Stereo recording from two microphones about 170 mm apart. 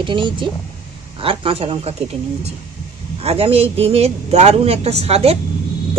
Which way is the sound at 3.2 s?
35° right (ahead or behind).